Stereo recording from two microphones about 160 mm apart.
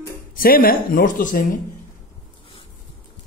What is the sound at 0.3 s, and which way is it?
Speech, 65° left (ahead or behind).